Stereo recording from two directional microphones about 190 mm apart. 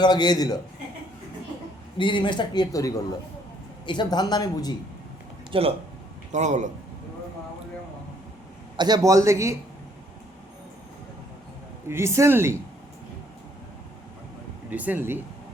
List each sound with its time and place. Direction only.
0.0 s a woman's voice: 20° left (ahead or behind)
2.0 s a woman's voice: 25° left (ahead or behind)
5.5 s a man's voice: 30° right (ahead or behind)
8.7 s a man's voice: 20° right (ahead or behind)
11.9 s a man's voice: 15° right (ahead or behind)
14.7 s a man's voice: 10° right (ahead or behind)